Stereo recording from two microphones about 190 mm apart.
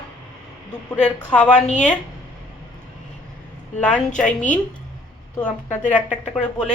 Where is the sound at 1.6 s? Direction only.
40° left (ahead or behind).